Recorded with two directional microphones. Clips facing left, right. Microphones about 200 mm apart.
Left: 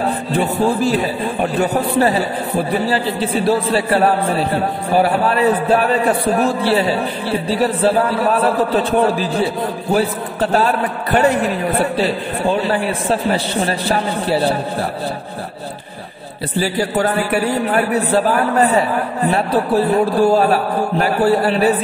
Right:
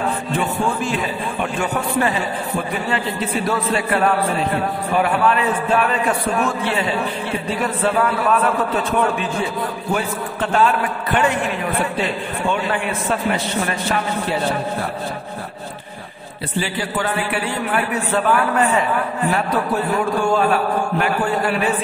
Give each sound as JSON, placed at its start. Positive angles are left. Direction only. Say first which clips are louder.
{"t": 0.0, "sound": "speech", "louder": "left 3 dB", "side_deg": 35}
{"t": 16.5, "sound": "speech", "louder": "left 5 dB", "side_deg": 40}